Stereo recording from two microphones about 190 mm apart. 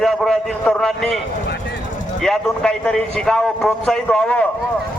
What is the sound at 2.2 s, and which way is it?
A man's voice, 5° left (ahead or behind).